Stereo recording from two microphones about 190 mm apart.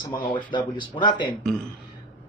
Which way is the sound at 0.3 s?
25° left (ahead or behind).